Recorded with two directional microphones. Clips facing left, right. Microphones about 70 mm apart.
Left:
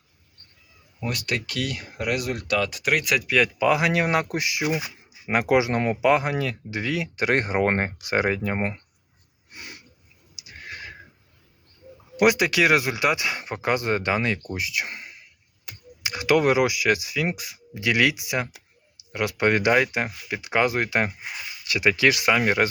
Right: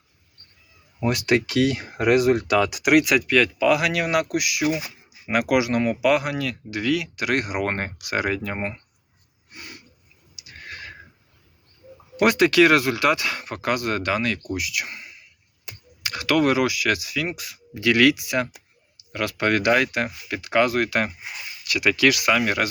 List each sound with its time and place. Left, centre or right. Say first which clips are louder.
0.9 s speech: right 8 dB; right; by 3.3 s centre
3.6 s speech: right 1 dB; left
9.5 s a sound: even; left
10.3 s neigh: even; centre
12.2 s speech: right 3 dB; centre